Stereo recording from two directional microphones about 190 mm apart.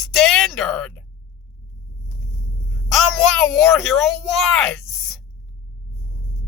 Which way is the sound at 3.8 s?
Centre (ahead or behind).